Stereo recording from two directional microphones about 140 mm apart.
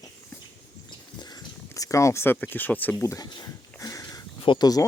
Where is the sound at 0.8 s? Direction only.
30° left (ahead or behind).